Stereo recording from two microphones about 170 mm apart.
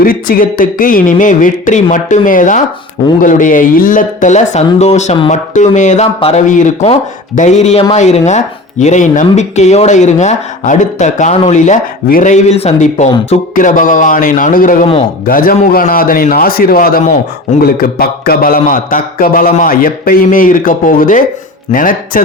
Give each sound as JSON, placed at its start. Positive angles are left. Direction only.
{"t": 0.0, "sound": "speech", "side_deg": 55}
{"t": 6.1, "sound": "a man's voice", "side_deg": 35}
{"t": 6.5, "sound": "a man's voice", "side_deg": 45}